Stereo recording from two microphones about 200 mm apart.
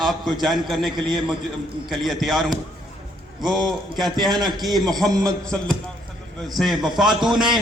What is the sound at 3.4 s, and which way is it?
A man's voice, 20° right (ahead or behind).